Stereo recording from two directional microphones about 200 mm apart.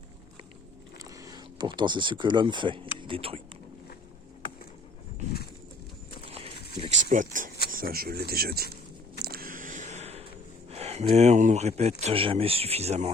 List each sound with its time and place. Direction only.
0.9 s speech: 15° right (ahead or behind)
6.2 s horse: 30° right (ahead or behind)
6.7 s a sound: 30° right (ahead or behind)
7.1 s speech: 40° right (ahead or behind)
9.2 s a sound: 45° right (ahead or behind)
10.7 s speech: 30° right (ahead or behind)